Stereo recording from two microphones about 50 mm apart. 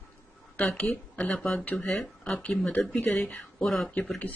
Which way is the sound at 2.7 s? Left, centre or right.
Left.